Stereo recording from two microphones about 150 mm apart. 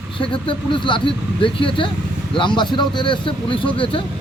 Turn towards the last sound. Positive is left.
turn(degrees=35)  # may be behind; listen again after turning